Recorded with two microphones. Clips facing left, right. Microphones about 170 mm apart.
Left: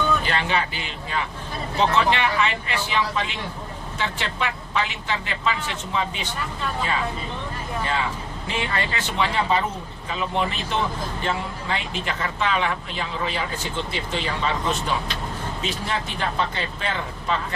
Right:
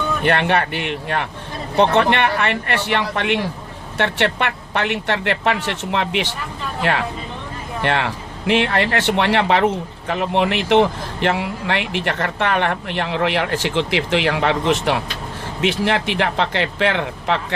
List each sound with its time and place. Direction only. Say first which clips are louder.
0.2 s a man's voice: right 7 dB; 65° right (ahead or behind)